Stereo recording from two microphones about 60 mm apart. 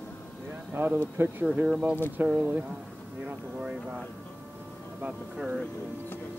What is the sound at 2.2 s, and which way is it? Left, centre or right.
Speech, right.